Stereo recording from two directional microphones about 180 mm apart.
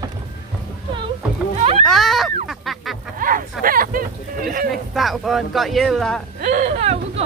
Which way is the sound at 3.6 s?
50° right (ahead or behind).